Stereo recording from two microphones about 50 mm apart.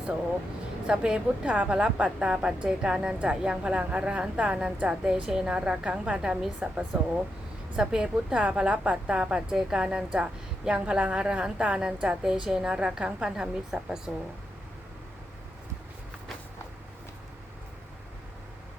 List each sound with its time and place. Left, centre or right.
0.9 s a woman's voice: right